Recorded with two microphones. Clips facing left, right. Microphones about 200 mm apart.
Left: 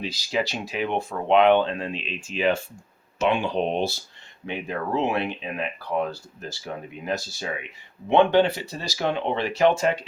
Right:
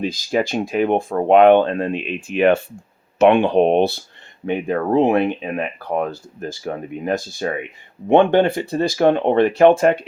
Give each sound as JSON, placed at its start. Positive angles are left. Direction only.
{"t": 0.0, "sound": "speech", "side_deg": -50}